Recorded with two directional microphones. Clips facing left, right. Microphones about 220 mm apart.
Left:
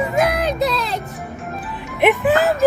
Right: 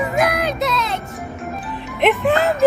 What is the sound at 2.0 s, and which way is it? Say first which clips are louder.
Speech: left 1 dB; 5° left (ahead or behind).